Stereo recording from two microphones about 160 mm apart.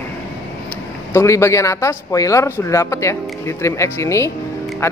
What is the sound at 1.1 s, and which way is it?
A man's voice, 20° left (ahead or behind).